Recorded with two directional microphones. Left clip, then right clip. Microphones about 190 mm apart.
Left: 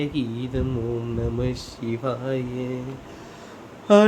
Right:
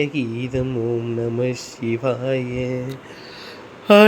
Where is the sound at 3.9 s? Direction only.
25° right (ahead or behind).